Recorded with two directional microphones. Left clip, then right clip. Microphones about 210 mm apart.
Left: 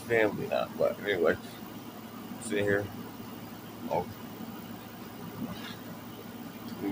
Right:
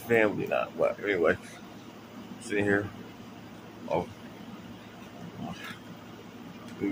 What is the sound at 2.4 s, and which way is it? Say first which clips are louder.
Speech: right 2 dB; centre (ahead or behind).